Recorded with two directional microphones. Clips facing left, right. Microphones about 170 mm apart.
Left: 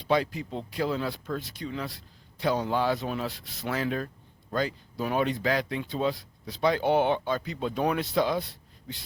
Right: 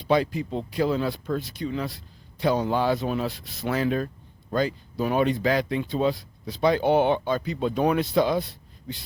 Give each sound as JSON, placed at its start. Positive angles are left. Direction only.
{"t": 0.8, "sound": "speech", "side_deg": -25}